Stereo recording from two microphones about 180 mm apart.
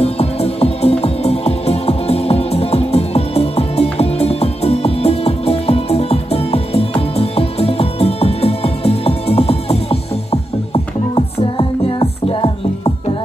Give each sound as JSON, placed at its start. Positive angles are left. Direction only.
{"t": 0.0, "sound": "music", "side_deg": 35}